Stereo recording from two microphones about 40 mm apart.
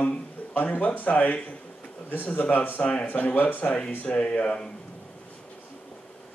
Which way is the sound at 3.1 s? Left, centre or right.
Left.